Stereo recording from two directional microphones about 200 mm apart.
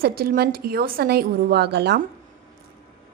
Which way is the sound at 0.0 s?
50° right (ahead or behind).